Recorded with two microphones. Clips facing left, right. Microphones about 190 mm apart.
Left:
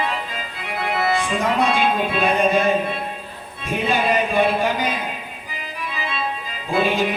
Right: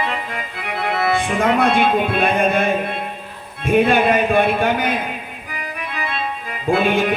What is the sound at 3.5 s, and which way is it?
A man's voice, 60° right (ahead or behind).